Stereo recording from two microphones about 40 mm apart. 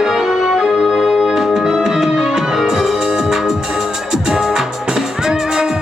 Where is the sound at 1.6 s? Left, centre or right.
Centre.